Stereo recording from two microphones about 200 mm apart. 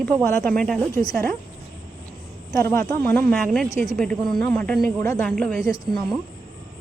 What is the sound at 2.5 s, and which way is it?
Speech, 15° left (ahead or behind).